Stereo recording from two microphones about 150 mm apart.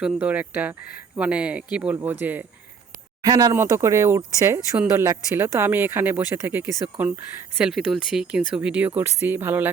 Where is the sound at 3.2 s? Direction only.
25° right (ahead or behind).